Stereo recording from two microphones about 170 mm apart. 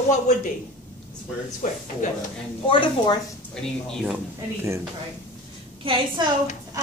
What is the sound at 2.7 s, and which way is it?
Speech, 30° left (ahead or behind).